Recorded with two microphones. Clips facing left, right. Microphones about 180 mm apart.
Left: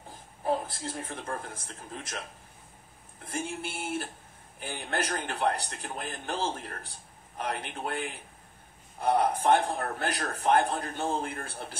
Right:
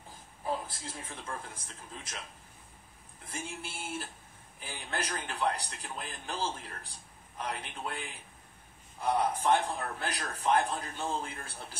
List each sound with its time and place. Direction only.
0.4 s a man's voice: 55° left (ahead or behind)
3.3 s a man's voice: 65° left (ahead or behind)